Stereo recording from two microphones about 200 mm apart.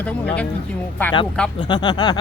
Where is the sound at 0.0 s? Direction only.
10° left (ahead or behind).